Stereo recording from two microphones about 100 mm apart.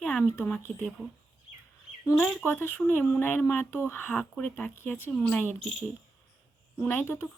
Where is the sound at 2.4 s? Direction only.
20° left (ahead or behind).